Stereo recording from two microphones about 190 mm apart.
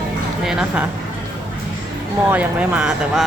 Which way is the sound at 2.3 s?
10° right (ahead or behind).